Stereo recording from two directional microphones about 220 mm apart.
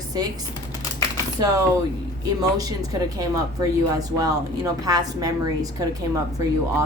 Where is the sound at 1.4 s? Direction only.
15° right (ahead or behind).